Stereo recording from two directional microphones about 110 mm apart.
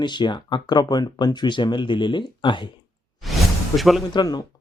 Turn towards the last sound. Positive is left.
turn(degrees=35)  # may be behind; listen again after turning